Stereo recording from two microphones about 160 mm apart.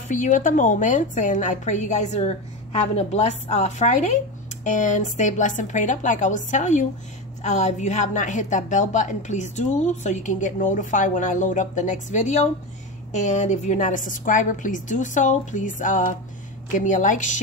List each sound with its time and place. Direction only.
0.1 s a woman's voice: 55° left (ahead or behind)